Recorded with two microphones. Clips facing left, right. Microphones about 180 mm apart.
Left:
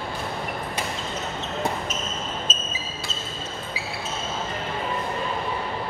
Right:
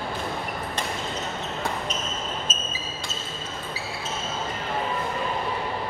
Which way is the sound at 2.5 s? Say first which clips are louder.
Left 1 dB; 10° right (ahead or behind).